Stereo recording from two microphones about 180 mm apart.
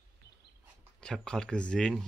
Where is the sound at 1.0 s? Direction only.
5° left (ahead or behind).